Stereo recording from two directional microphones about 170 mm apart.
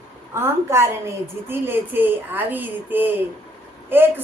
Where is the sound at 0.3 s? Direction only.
15° right (ahead or behind).